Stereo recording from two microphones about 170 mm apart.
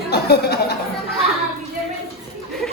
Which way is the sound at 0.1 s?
70° left (ahead or behind).